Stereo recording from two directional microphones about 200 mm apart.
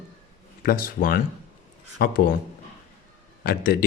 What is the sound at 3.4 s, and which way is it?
Speech, 45° left (ahead or behind).